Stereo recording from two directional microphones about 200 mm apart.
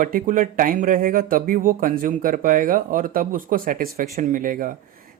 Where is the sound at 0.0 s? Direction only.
45° right (ahead or behind).